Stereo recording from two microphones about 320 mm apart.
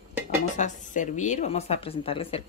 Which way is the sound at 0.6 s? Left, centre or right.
Left.